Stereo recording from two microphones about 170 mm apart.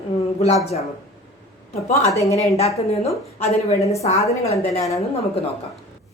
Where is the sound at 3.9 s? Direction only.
40° left (ahead or behind).